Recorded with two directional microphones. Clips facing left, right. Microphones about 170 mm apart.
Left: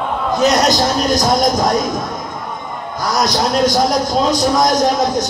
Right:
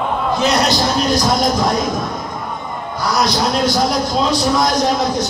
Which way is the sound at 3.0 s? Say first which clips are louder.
Even; 45° left (ahead or behind).